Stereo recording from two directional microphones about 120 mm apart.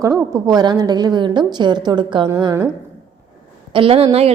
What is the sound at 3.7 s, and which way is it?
Speech, 50° right (ahead or behind).